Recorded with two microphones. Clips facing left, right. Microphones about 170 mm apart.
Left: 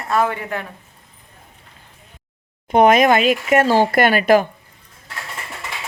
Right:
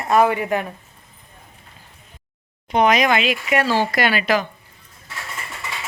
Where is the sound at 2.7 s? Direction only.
50° left (ahead or behind).